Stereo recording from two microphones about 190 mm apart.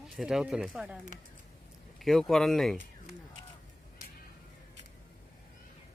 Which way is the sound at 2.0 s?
Centre (ahead or behind).